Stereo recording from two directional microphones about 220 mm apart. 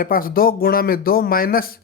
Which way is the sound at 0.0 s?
40° left (ahead or behind).